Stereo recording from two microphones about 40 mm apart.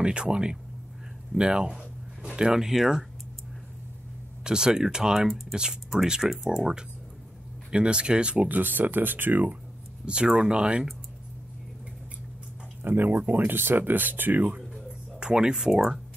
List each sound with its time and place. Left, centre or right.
0.0 s speech: right; by 3.1 s centre
4.5 s speech: centre
7.7 s speech: right
8.5 s speech: right
10.0 s speech: right
12.8 s speech: right
14.7 s a sound: right